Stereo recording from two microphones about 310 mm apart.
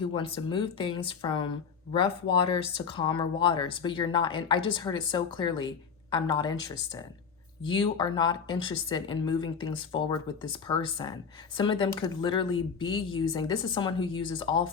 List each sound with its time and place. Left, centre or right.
0.0 s speech: centre